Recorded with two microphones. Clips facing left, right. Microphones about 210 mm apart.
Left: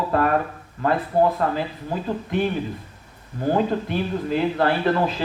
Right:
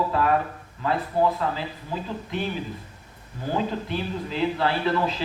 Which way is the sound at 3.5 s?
50° left (ahead or behind).